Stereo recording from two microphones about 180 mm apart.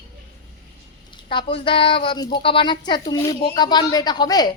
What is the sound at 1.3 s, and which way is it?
A woman's voice, 30° left (ahead or behind).